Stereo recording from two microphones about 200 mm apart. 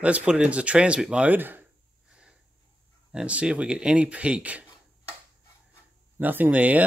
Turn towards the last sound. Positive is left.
turn(degrees=-5)  # may be behind; listen again after turning